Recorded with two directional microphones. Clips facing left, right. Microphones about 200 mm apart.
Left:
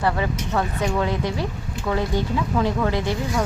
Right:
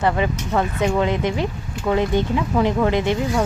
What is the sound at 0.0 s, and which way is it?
Speech, 20° right (ahead or behind).